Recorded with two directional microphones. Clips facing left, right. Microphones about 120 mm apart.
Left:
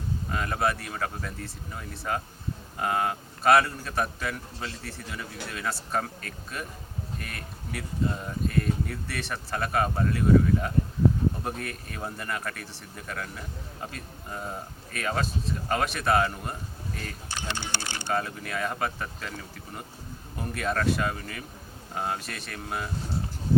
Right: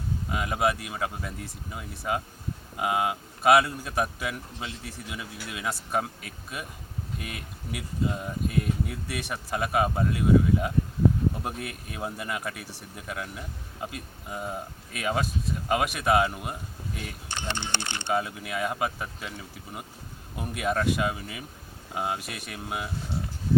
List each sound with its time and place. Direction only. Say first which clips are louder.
0.3 s speech: right 1 dB; 10° right (ahead or behind)
17.6 s speech: right 1 dB; 20° right (ahead or behind)
18.1 s speech: right 1 dB; 10° right (ahead or behind)